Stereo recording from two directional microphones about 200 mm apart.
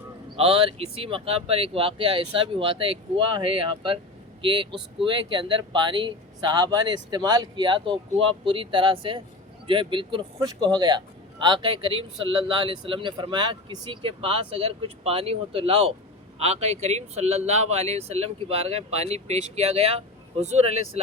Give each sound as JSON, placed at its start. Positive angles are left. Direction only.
{"t": 0.3, "sound": "speech", "side_deg": -30}